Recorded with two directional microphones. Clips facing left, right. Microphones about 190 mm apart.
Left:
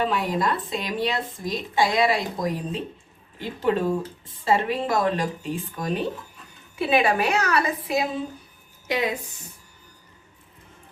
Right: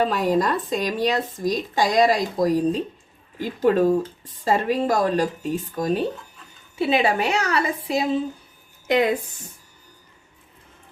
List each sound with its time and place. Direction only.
0.0 s speech: 40° right (ahead or behind)
6.7 s a woman's voice: 25° right (ahead or behind)